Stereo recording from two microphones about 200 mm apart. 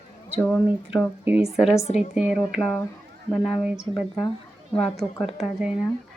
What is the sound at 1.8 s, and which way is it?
Speech, 35° left (ahead or behind).